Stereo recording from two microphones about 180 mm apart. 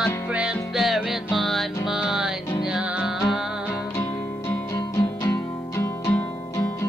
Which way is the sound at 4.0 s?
15° left (ahead or behind).